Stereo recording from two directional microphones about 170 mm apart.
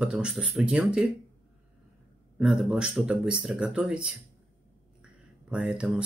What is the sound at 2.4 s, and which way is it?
Speech, 5° right (ahead or behind).